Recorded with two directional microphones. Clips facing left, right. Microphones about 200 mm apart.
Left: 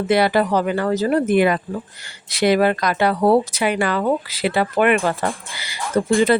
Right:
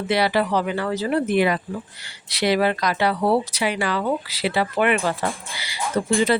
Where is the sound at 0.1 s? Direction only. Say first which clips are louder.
Left 3 dB; 50° left (ahead or behind).